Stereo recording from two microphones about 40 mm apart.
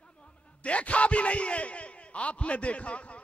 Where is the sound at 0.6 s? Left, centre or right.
Left.